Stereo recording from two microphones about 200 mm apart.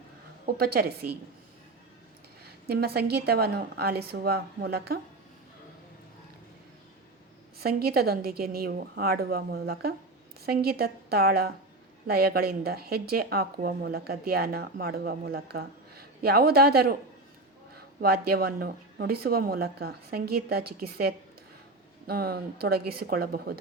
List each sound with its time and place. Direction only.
0.4 s speech: 50° right (ahead or behind)
2.4 s speech: 50° right (ahead or behind)
7.6 s speech: 50° right (ahead or behind)
18.0 s speech: 50° right (ahead or behind)